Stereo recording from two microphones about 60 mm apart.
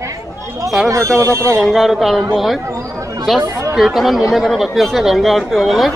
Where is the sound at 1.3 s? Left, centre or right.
Right.